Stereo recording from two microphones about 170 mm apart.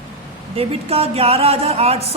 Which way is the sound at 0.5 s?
35° right (ahead or behind).